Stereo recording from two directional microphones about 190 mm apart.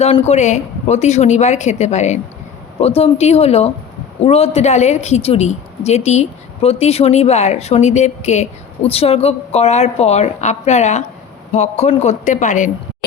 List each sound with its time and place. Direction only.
0.0 s a woman's voice: 35° left (ahead or behind)